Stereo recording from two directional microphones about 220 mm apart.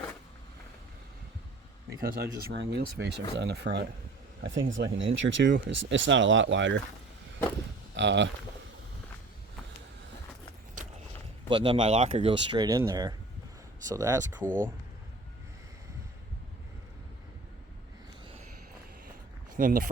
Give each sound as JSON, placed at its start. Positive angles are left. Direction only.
{"t": 2.0, "sound": "speech", "side_deg": -45}
{"t": 7.9, "sound": "speech", "side_deg": -55}
{"t": 11.4, "sound": "speech", "side_deg": -20}
{"t": 19.5, "sound": "speech", "side_deg": -40}